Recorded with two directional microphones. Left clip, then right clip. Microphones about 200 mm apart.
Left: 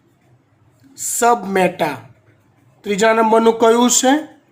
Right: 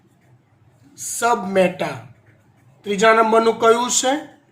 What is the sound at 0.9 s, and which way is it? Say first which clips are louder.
Speech: left 4 dB; 50° left (ahead or behind).